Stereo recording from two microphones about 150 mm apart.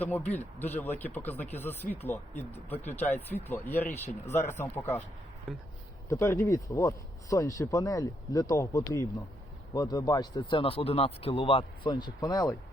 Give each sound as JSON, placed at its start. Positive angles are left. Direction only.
{"t": 0.0, "sound": "speech", "side_deg": 10}
{"t": 3.0, "sound": "speech", "side_deg": 45}
{"t": 3.5, "sound": "speech", "side_deg": 15}
{"t": 5.5, "sound": "speech", "side_deg": 0}
{"t": 6.1, "sound": "speech", "side_deg": 20}